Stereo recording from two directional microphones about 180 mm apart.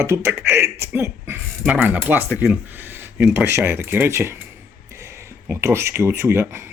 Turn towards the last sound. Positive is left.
turn(degrees=-15)  # may be behind; listen again after turning